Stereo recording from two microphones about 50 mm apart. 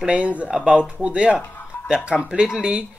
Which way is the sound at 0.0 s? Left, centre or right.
Right.